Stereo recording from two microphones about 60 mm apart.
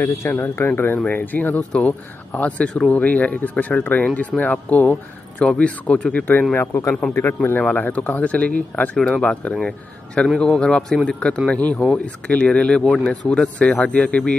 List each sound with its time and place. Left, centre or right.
0.2 s speech: left; by 2.9 s centre
2.9 s speech: left
7.0 s speech: centre
7.6 s speech: left
9.6 s speech: centre